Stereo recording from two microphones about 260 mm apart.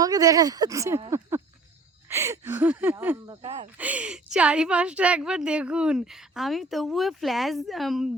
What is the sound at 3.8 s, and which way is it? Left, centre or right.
A woman's voice, centre.